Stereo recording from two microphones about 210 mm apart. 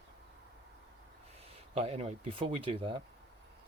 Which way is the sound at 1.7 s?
30° right (ahead or behind).